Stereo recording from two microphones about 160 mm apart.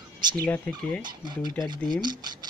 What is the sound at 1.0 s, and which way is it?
Speech, 25° right (ahead or behind).